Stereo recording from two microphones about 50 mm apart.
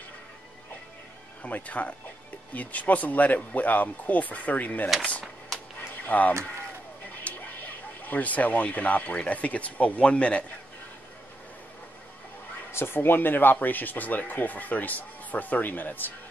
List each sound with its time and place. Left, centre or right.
1.4 s speech: left
5.8 s a sound: left
7.2 s speech: left
12.7 s speech: left